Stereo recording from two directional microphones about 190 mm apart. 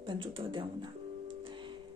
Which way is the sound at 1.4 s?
25° right (ahead or behind).